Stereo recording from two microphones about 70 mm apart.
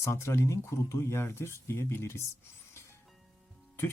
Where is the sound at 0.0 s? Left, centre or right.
Left.